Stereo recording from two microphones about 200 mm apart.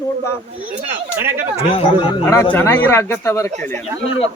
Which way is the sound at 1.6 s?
25° left (ahead or behind).